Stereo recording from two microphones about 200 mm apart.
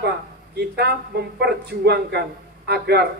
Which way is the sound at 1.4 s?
55° right (ahead or behind).